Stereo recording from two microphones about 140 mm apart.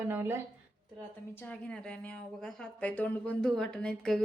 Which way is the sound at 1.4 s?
10° left (ahead or behind).